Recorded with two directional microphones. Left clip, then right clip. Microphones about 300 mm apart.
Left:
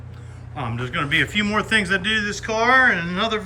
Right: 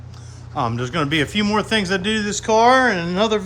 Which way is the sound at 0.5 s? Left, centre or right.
Centre.